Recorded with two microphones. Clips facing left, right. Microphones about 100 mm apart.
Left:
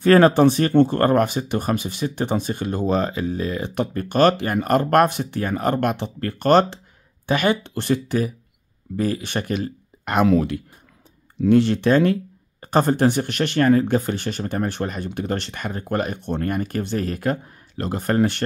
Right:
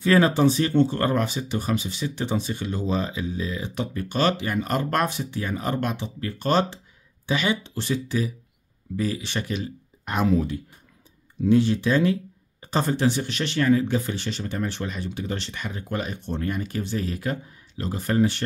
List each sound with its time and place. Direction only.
0.0 s speech: 55° left (ahead or behind)
10.0 s speech: 70° left (ahead or behind); by 18.4 s 55° left (ahead or behind)